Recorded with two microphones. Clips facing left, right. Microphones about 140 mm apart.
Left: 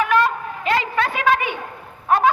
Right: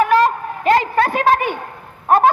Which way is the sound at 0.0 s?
40° right (ahead or behind).